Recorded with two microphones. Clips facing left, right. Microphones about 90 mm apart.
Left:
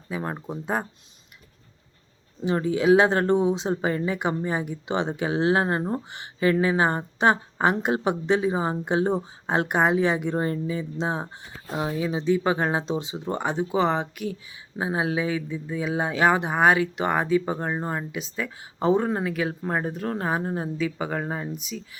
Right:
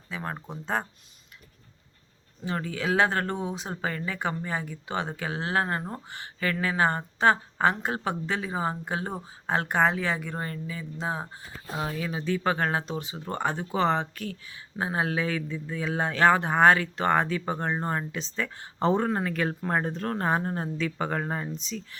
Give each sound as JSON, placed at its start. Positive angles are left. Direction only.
{"t": 0.1, "sound": "speech", "side_deg": 15}
{"t": 2.4, "sound": "speech", "side_deg": 20}